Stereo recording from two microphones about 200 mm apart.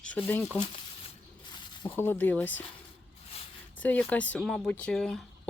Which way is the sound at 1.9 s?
10° left (ahead or behind).